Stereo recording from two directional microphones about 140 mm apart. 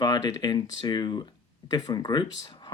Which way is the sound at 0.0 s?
30° left (ahead or behind).